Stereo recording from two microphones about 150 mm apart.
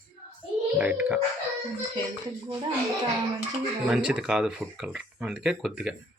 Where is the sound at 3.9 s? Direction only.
5° right (ahead or behind).